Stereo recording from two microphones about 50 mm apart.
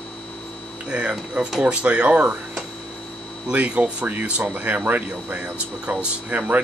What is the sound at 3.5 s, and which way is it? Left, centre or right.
Speech, right.